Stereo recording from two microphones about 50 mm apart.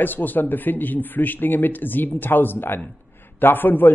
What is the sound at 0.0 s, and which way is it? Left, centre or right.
Speech, left.